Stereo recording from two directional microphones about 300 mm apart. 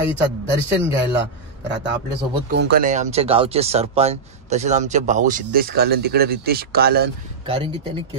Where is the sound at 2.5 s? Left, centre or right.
Right.